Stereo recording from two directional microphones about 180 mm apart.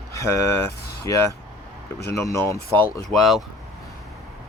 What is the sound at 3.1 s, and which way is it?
Speech, centre (ahead or behind).